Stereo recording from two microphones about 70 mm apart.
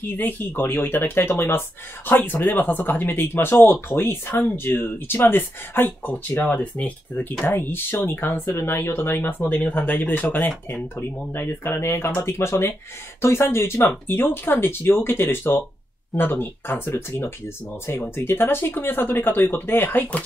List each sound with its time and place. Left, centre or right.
0.2 s speech: left